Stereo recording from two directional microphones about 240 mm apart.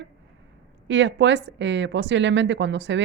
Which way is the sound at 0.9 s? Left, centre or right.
Right.